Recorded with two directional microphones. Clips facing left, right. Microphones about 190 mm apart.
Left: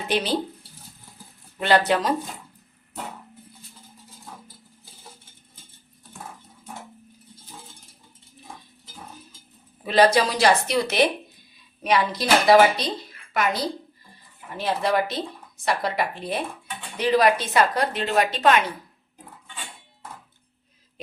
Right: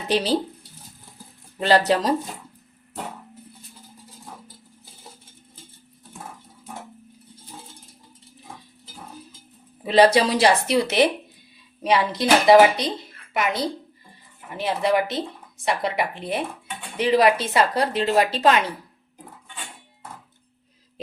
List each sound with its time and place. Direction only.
0.1 s speech: 35° right (ahead or behind)
1.5 s speech: 30° right (ahead or behind)
9.8 s speech: 30° right (ahead or behind)